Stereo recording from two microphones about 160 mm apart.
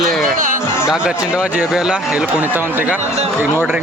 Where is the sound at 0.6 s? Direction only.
15° left (ahead or behind).